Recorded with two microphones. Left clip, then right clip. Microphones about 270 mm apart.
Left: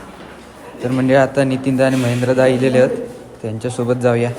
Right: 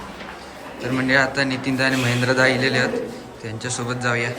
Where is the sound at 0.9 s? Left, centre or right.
Centre.